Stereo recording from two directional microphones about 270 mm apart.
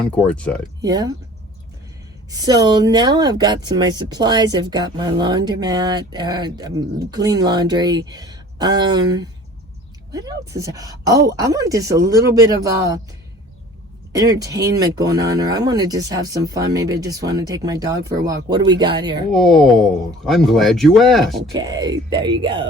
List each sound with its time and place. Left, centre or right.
0.3 s speech: centre
0.8 s speech: centre
2.3 s speech: centre
14.1 s speech: centre
19.3 s speech: centre
21.5 s speech: centre